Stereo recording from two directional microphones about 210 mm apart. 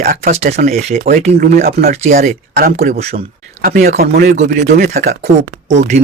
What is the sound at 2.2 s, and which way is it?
Speech, 45° right (ahead or behind).